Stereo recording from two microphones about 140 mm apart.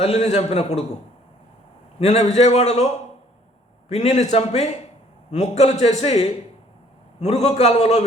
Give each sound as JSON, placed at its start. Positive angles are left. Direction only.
{"t": 0.0, "sound": "a man's voice", "side_deg": 50}
{"t": 2.0, "sound": "a man's voice", "side_deg": 50}